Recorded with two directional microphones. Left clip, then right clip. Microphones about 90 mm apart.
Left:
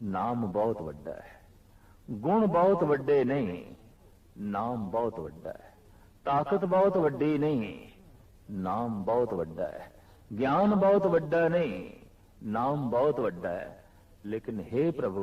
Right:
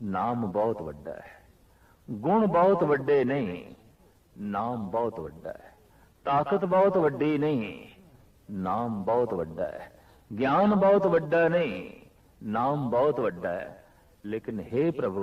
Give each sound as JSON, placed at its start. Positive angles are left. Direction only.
{"t": 0.1, "sound": "a man's voice", "side_deg": -35}